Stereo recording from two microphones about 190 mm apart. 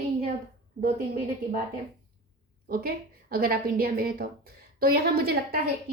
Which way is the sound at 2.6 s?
50° right (ahead or behind).